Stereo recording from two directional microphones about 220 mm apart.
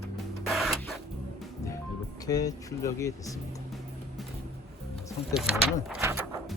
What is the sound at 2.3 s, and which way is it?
Speech, 15° left (ahead or behind).